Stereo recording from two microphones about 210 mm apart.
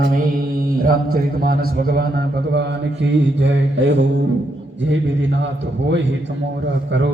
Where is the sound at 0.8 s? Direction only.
45° right (ahead or behind).